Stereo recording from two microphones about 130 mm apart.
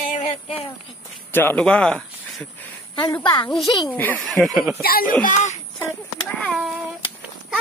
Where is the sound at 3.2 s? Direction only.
40° left (ahead or behind).